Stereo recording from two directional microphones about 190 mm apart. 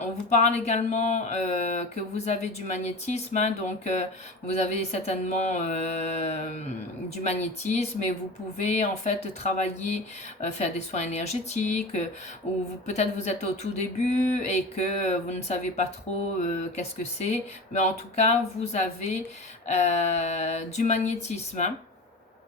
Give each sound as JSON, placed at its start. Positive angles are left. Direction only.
{"t": 0.3, "sound": "speech", "side_deg": 35}